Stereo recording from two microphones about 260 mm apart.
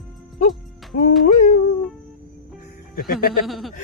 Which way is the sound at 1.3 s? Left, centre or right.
Left.